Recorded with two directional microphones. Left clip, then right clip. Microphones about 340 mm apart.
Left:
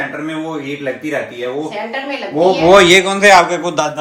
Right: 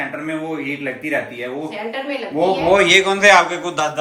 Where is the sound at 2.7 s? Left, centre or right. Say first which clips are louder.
Left 3 dB; centre.